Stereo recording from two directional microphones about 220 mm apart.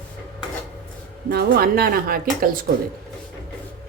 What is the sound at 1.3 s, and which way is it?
Speech, 45° right (ahead or behind).